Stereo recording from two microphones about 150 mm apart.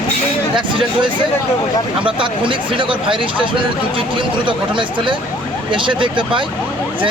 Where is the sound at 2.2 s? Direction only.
35° right (ahead or behind).